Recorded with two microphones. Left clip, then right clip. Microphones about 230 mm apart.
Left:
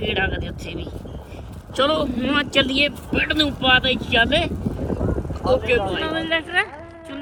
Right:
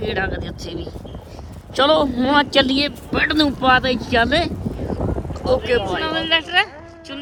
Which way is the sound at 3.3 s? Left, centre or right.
Right.